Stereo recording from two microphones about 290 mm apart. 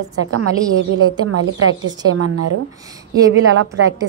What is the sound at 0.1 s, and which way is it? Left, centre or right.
A woman's voice, right.